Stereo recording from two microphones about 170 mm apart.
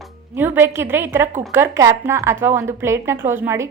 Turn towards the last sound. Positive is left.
turn(degrees=-15)  # may be behind; listen again after turning